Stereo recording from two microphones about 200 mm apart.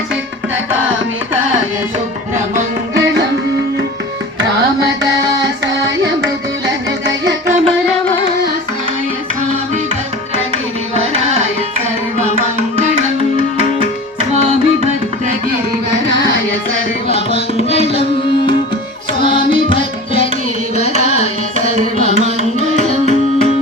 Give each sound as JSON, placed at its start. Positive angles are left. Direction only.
{"t": 11.0, "sound": "music", "side_deg": -35}
{"t": 14.4, "sound": "music", "side_deg": -35}
{"t": 17.1, "sound": "music", "side_deg": 30}
{"t": 19.2, "sound": "music", "side_deg": 25}
{"t": 20.7, "sound": "carnatic music", "side_deg": 35}
{"t": 21.6, "sound": "music", "side_deg": -40}